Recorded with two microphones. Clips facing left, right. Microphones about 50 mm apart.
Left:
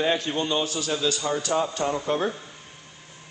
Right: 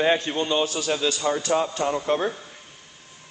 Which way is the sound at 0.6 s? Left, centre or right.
Right.